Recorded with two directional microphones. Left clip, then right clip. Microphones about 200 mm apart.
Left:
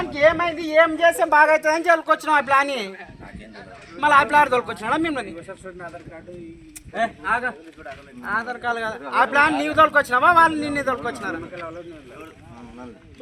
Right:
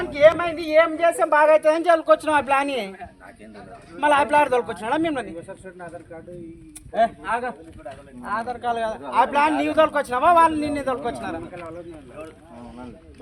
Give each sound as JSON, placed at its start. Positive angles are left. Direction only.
{"t": 0.2, "sound": "speech", "side_deg": -40}
{"t": 3.9, "sound": "speech", "side_deg": -55}
{"t": 6.9, "sound": "speech", "side_deg": -50}